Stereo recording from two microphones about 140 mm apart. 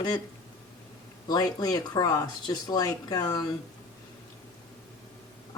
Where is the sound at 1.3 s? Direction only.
30° left (ahead or behind).